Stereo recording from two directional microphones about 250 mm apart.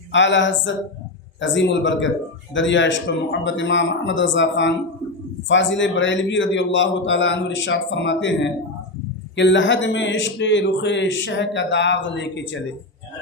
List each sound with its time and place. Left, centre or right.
0.1 s a man's voice: left